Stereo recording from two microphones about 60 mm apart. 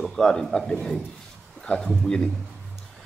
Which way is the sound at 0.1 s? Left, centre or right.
Centre.